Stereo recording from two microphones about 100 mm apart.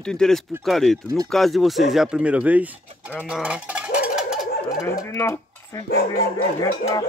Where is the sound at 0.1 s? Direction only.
5° left (ahead or behind); by 2.6 s 15° right (ahead or behind).